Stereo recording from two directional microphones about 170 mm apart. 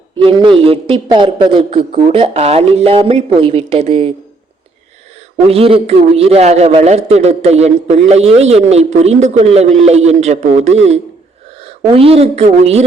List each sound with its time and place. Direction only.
0.2 s a man's voice: 30° right (ahead or behind)
5.5 s a man's voice: 35° right (ahead or behind)